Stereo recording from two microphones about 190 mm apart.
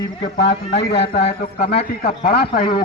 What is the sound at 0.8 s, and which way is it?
Speech, 60° left (ahead or behind).